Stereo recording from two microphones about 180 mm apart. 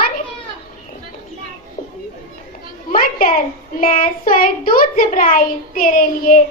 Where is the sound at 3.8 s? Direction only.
50° left (ahead or behind).